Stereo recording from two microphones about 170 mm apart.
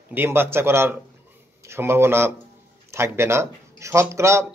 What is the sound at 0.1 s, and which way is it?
A man's voice, 10° right (ahead or behind).